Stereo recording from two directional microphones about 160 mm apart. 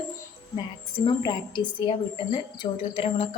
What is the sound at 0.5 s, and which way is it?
A woman's voice, 30° left (ahead or behind).